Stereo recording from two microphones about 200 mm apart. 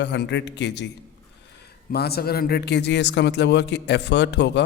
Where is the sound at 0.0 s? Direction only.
60° left (ahead or behind).